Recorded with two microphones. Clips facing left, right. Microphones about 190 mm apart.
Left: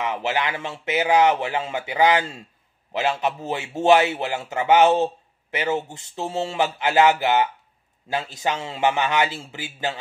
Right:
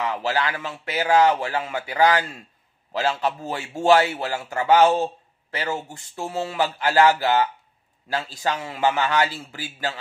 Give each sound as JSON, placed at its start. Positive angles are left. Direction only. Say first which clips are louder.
{"t": 0.0, "sound": "a man's voice", "louder": "even", "side_deg": 20}